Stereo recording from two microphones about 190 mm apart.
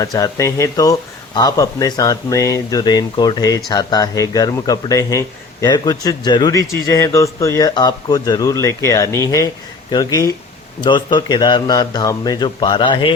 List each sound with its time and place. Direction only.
0.0 s speech: 20° left (ahead or behind)